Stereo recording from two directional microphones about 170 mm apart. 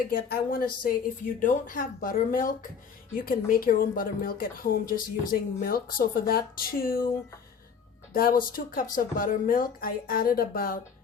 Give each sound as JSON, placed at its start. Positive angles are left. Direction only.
{"t": 0.1, "sound": "a woman's voice", "side_deg": 60}
{"t": 8.1, "sound": "a woman's voice", "side_deg": 60}